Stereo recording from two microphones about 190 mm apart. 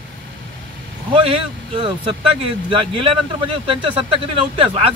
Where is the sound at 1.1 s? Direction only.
25° right (ahead or behind).